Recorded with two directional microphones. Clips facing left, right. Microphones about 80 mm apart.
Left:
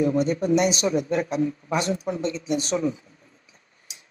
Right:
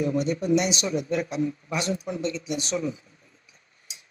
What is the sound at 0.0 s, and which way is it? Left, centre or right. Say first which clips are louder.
Speech: left 3 dB; left.